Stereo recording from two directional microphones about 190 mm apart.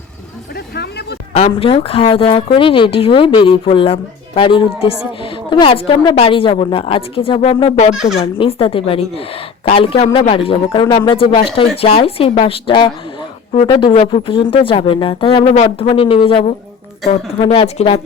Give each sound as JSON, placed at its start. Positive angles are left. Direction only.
{"t": 1.3, "sound": "speech", "side_deg": 35}
{"t": 17.0, "sound": "speech", "side_deg": 0}
{"t": 17.4, "sound": "speech", "side_deg": 30}